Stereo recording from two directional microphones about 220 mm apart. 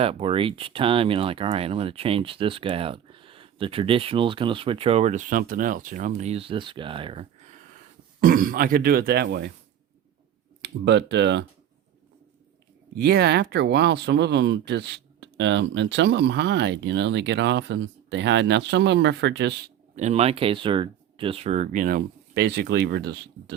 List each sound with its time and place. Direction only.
0.0 s speech: 25° right (ahead or behind)
8.2 s speech: 40° right (ahead or behind)
10.6 s speech: 50° right (ahead or behind)
13.0 s speech: 50° right (ahead or behind)
20.0 s speech: 30° right (ahead or behind); by 23.6 s 50° right (ahead or behind)